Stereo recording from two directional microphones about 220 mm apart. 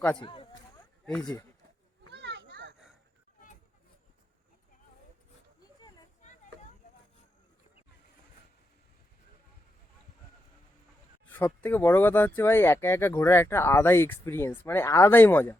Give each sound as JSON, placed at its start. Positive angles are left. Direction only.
{"t": 0.2, "sound": "speech", "side_deg": 20}
{"t": 2.0, "sound": "children playing", "side_deg": -50}
{"t": 11.3, "sound": "speech", "side_deg": 10}